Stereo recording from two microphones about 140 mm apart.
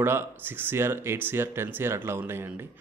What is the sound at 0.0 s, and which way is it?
A man's voice, 15° right (ahead or behind).